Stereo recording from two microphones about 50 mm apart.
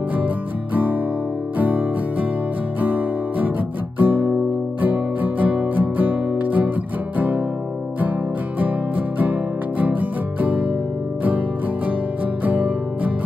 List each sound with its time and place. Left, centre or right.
1.6 s music: right
8.5 s music: right
12.4 s music: right